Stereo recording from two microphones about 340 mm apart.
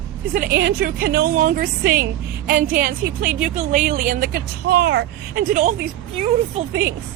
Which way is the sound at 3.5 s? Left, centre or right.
Right.